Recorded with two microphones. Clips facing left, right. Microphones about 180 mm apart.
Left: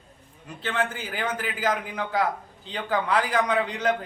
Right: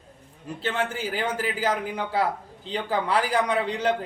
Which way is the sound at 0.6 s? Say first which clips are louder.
Right 1 dB; 25° right (ahead or behind).